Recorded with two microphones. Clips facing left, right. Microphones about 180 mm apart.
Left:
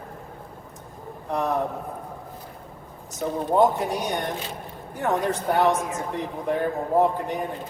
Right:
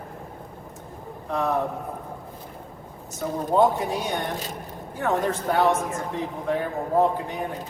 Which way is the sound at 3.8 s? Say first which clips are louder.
Even; 15° left (ahead or behind).